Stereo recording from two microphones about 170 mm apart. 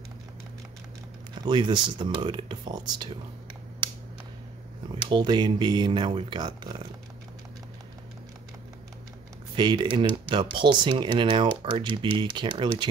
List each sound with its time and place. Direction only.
1.4 s speech: 25° right (ahead or behind)
5.1 s speech: 25° right (ahead or behind)
9.6 s speech: 30° right (ahead or behind)